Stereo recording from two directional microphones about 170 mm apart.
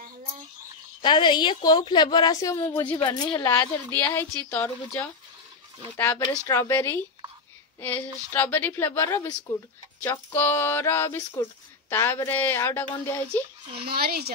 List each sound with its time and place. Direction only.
1.0 s a woman's voice: 30° left (ahead or behind)
13.8 s speech: 65° right (ahead or behind)